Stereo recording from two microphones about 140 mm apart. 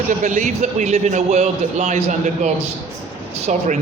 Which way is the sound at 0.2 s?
55° right (ahead or behind).